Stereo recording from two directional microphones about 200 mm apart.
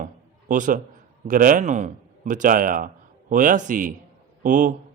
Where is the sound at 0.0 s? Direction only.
40° right (ahead or behind).